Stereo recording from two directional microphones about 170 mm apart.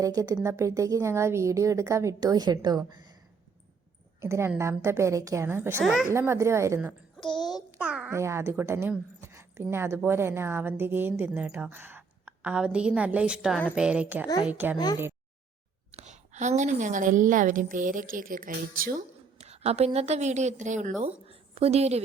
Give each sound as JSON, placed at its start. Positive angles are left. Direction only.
{"t": 0.0, "sound": "speech", "side_deg": -20}
{"t": 4.2, "sound": "speech", "side_deg": -15}
{"t": 5.8, "sound": "a woman's voice", "side_deg": 0}
{"t": 6.1, "sound": "speech", "side_deg": -15}
{"t": 15.9, "sound": "a woman's voice", "side_deg": -40}
{"t": 19.4, "sound": "a woman's voice", "side_deg": -40}
{"t": 21.0, "sound": "a woman's voice", "side_deg": -35}